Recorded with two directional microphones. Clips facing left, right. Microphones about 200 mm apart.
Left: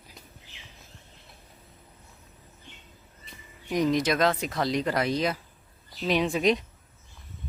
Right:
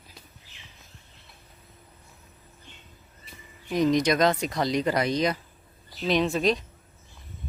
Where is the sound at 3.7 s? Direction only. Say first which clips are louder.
Right 2 dB; 10° left (ahead or behind).